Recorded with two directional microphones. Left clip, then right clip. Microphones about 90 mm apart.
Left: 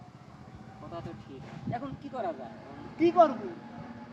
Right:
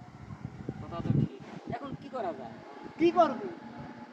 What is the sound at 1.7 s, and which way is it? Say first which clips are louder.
Speech: left 1 dB; 15° left (ahead or behind).